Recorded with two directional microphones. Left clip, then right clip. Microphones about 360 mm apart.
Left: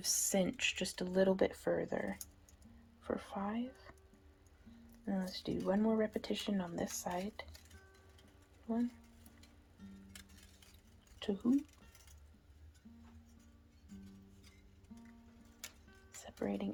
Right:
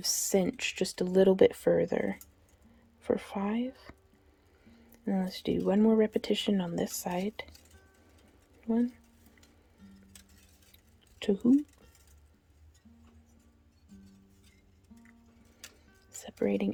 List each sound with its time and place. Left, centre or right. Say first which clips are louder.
0.0 s speech: right 6 dB; centre
5.0 s speech: right 8 dB; right
9.8 s music: even; centre
11.2 s speech: right 9 dB; right
16.2 s music: right 10 dB; right